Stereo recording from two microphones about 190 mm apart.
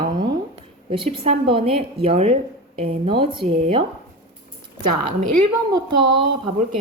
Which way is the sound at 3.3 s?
30° right (ahead or behind).